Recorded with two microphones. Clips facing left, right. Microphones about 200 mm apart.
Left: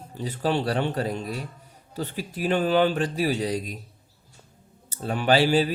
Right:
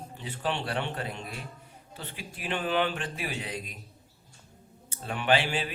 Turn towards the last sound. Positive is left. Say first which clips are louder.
# left 7 dB
turn(degrees=40)  # may be behind; listen again after turning